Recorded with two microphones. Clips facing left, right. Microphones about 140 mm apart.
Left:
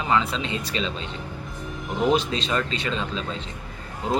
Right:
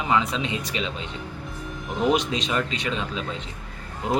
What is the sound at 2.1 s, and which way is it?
Speech, 15° right (ahead or behind).